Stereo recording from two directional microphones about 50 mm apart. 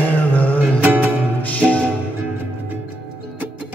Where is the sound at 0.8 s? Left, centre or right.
Right.